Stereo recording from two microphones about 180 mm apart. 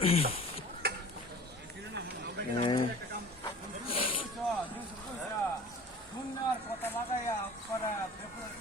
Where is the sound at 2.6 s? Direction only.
25° left (ahead or behind).